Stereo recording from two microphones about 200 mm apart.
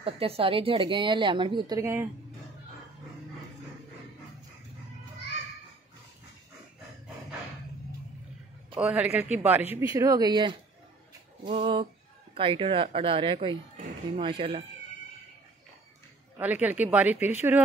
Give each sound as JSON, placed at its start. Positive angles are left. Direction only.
{"t": 0.0, "sound": "a woman's voice", "side_deg": -30}
{"t": 8.7, "sound": "speech", "side_deg": -5}
{"t": 11.5, "sound": "a woman's voice", "side_deg": -25}
{"t": 16.3, "sound": "speech", "side_deg": -10}